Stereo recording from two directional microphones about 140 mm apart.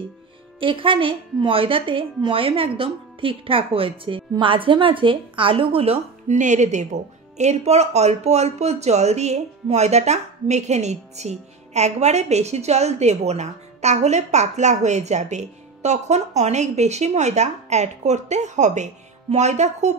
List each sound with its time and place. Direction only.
0.6 s a woman's voice: 40° right (ahead or behind); by 20.0 s 55° right (ahead or behind)